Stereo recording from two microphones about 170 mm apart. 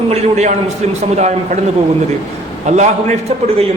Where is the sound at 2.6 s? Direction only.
45° right (ahead or behind).